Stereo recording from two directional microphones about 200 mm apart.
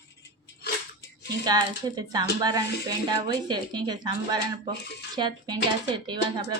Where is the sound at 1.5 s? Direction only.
20° right (ahead or behind).